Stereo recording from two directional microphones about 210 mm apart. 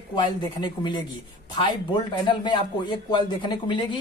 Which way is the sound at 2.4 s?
20° left (ahead or behind).